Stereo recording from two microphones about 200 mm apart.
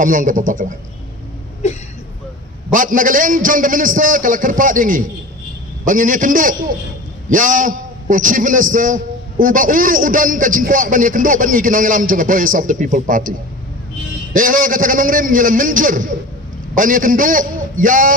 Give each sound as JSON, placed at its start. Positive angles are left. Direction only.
{"t": 0.0, "sound": "a man's voice", "side_deg": -40}
{"t": 2.7, "sound": "a man's voice", "side_deg": -40}
{"t": 14.3, "sound": "a man's voice", "side_deg": -45}